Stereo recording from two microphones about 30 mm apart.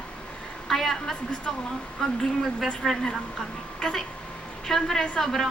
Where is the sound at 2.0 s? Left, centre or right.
Left.